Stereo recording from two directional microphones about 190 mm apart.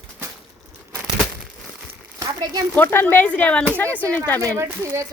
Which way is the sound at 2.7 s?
10° left (ahead or behind).